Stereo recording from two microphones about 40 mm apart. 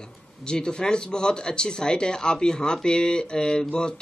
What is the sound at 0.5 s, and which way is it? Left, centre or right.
Speech, left.